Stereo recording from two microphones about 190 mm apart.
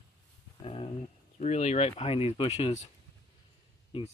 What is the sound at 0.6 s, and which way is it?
Speech, 30° left (ahead or behind).